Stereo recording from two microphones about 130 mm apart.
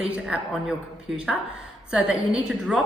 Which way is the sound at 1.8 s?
5° right (ahead or behind).